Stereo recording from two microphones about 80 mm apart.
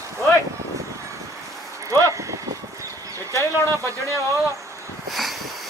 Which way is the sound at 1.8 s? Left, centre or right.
Right.